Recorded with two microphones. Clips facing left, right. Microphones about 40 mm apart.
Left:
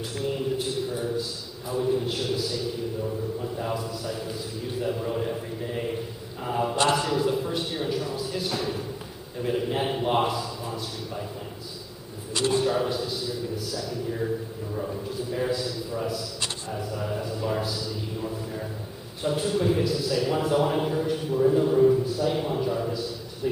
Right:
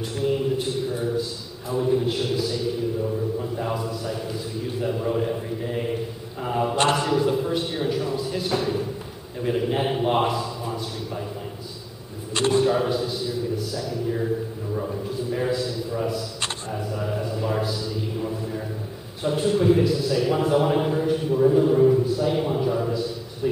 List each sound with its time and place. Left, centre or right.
0.1 s a man's voice: centre
7.0 s a sound: centre
9.4 s a man's voice: centre
12.5 s a man's voice: centre
15.3 s a man's voice: centre
19.2 s a man's voice: centre